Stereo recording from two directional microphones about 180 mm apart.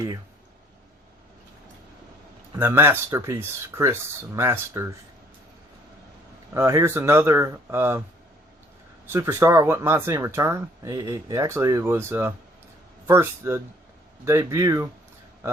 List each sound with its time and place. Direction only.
2.6 s speech: 10° right (ahead or behind)
6.5 s speech: 15° right (ahead or behind)
9.0 s speech: 15° right (ahead or behind)